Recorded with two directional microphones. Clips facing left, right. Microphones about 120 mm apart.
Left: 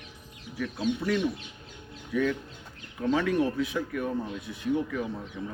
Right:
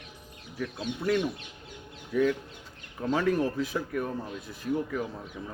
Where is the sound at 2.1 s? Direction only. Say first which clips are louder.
Right 2 dB; 35° right (ahead or behind).